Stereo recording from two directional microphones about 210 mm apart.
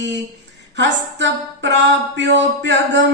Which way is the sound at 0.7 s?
60° right (ahead or behind).